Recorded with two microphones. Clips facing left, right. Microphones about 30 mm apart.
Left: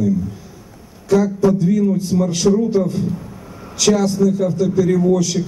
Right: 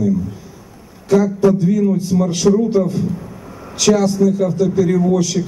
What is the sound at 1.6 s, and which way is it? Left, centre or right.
A man's voice, centre.